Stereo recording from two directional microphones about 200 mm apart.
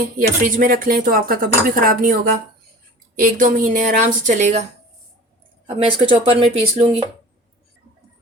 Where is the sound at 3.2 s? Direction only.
45° right (ahead or behind).